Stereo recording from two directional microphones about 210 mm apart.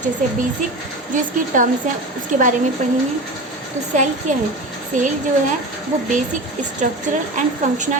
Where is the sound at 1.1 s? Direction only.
40° right (ahead or behind).